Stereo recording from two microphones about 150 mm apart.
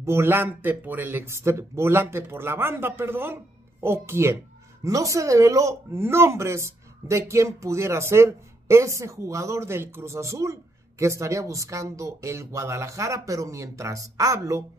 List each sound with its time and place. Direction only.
0.0 s speech: 15° right (ahead or behind)